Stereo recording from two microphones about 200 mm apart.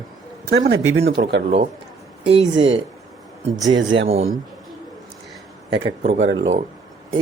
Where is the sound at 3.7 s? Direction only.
70° right (ahead or behind).